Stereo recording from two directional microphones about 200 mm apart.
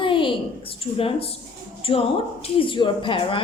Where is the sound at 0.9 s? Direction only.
30° left (ahead or behind).